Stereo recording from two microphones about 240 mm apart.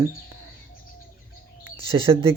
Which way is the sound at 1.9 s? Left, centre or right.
Centre.